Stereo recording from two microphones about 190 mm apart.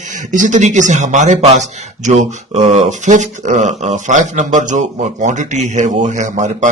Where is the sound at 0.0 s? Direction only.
40° right (ahead or behind).